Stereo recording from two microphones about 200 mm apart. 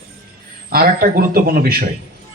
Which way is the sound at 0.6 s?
45° right (ahead or behind).